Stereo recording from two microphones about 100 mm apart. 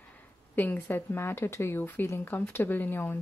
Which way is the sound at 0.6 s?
15° left (ahead or behind).